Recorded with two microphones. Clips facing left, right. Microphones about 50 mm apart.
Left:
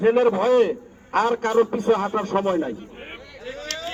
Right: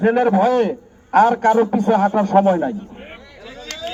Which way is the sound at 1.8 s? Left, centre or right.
Centre.